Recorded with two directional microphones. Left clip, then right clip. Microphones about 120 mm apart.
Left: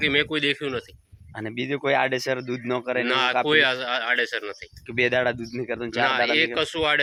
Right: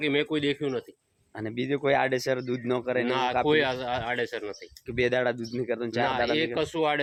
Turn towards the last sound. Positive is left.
turn(degrees=-35)  # may be behind; listen again after turning